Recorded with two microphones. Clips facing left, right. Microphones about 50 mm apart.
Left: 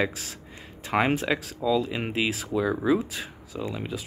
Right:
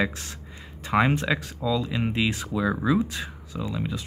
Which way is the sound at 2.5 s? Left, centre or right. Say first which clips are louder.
Even; centre.